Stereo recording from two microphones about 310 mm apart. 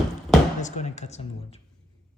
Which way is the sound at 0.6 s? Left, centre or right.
Left.